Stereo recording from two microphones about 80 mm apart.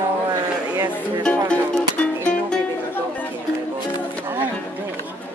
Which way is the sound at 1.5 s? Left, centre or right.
Centre.